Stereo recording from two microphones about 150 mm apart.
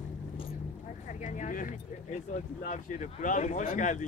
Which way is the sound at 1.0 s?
55° left (ahead or behind).